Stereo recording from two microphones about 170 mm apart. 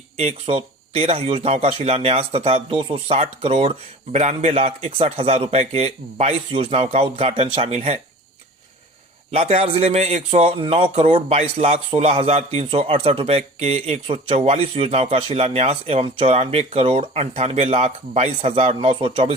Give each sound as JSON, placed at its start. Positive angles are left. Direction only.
{"t": 0.2, "sound": "a man's voice", "side_deg": -35}
{"t": 9.3, "sound": "a man's voice", "side_deg": -40}